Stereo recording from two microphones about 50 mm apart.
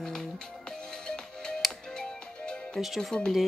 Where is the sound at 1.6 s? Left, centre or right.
Centre.